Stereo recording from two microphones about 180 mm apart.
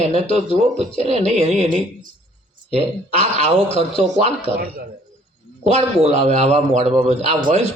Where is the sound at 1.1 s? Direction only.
35° right (ahead or behind).